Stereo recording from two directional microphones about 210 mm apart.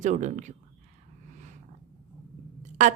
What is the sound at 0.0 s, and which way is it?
Speech, 35° right (ahead or behind).